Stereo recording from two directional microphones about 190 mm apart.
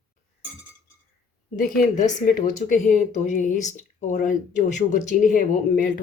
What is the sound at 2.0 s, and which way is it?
Speech, 40° left (ahead or behind).